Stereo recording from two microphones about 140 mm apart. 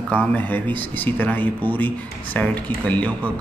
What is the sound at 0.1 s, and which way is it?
Speech, 10° left (ahead or behind).